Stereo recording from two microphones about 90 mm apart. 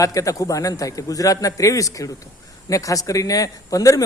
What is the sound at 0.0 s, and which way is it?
Speech, 40° left (ahead or behind).